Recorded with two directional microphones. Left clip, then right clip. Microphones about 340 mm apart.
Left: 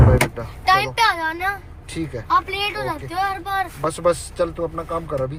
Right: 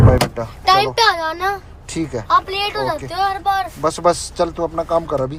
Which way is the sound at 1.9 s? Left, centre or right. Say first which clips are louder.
Right 4 dB; centre.